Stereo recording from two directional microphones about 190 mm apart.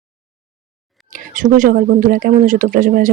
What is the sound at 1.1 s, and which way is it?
Speech, 45° right (ahead or behind).